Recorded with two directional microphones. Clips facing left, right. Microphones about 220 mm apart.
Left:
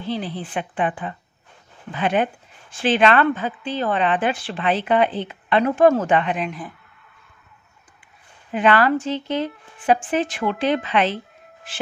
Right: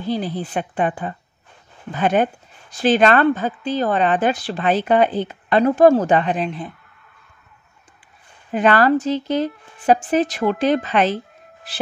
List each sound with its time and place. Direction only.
0.0 s speech: 40° right (ahead or behind)
8.5 s speech: 40° right (ahead or behind)